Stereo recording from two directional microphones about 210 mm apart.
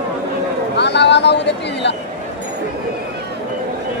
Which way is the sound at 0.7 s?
55° left (ahead or behind).